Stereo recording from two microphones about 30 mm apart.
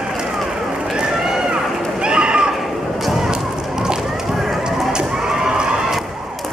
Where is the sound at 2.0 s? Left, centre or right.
Right.